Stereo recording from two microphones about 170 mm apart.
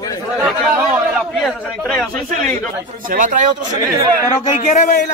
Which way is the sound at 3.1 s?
50° right (ahead or behind).